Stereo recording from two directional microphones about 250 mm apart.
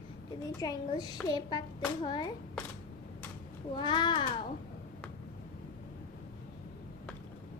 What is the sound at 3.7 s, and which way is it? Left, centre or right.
Speech, centre.